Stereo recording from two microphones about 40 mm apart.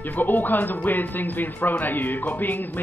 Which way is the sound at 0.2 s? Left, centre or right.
Left.